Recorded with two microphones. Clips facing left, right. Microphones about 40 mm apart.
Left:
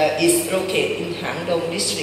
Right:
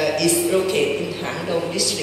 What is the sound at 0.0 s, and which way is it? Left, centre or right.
A man's voice, centre.